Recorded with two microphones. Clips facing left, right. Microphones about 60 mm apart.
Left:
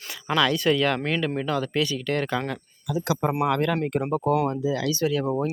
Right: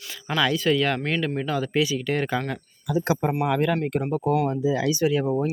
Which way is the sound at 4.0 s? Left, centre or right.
Centre.